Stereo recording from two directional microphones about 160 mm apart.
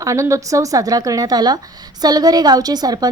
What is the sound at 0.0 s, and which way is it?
Speech, 20° right (ahead or behind).